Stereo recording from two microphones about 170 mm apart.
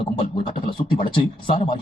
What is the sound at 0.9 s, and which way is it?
Speech, 30° left (ahead or behind).